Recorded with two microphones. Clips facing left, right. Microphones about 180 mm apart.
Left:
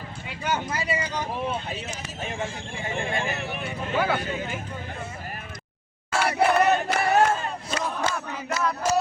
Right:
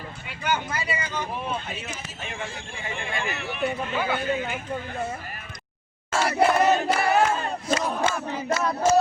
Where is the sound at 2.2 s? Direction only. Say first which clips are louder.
Left 4 dB; 40° left (ahead or behind).